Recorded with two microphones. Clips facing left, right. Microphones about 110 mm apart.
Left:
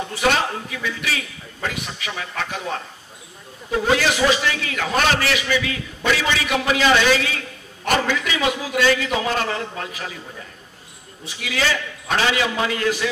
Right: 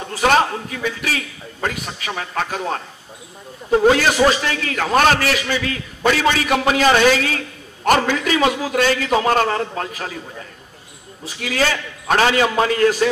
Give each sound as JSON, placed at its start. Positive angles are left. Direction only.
{"t": 1.6, "sound": "a man's voice", "side_deg": -45}
{"t": 11.4, "sound": "a man's voice", "side_deg": -45}